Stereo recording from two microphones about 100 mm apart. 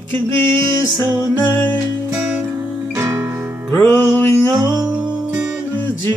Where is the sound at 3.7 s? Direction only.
20° left (ahead or behind).